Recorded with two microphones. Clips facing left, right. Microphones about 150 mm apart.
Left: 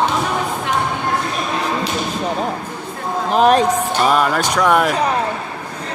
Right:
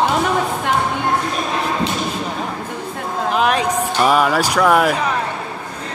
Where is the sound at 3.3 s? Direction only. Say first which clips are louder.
Left 5 dB; 40° left (ahead or behind).